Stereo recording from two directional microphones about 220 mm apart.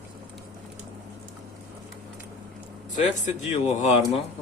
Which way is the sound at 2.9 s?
35° left (ahead or behind).